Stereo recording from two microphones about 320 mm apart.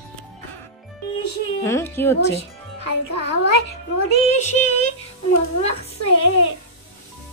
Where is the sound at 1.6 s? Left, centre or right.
Centre.